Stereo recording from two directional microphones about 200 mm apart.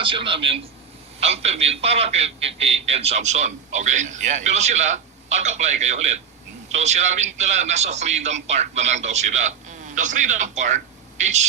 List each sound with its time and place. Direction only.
0.0 s a man's voice: 25° right (ahead or behind)